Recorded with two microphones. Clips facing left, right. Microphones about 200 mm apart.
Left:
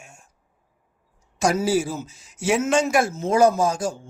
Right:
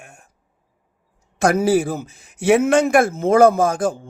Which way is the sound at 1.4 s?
60° right (ahead or behind).